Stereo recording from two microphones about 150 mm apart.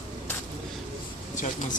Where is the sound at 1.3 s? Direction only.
55° left (ahead or behind).